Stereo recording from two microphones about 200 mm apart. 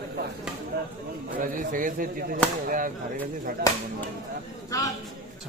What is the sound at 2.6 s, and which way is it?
Speech, 45° right (ahead or behind).